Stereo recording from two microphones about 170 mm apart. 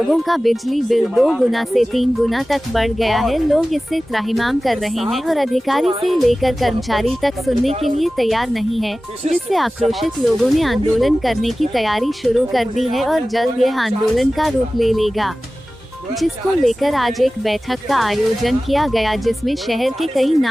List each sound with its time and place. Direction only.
0.1 s speech: centre (ahead or behind)